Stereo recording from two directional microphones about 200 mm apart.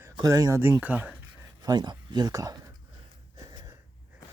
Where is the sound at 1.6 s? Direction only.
20° right (ahead or behind).